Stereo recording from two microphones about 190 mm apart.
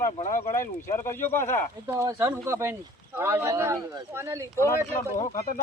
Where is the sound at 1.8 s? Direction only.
15° right (ahead or behind).